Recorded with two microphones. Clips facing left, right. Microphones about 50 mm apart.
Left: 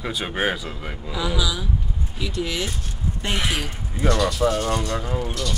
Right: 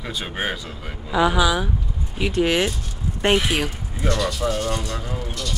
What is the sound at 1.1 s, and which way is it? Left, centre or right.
Speech, right.